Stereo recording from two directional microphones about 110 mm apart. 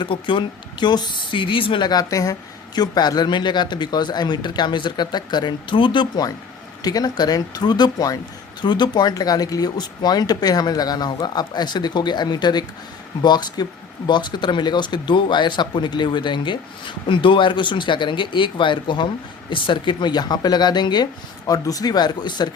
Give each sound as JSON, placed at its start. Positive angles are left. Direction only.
{"t": 0.0, "sound": "speech", "side_deg": 45}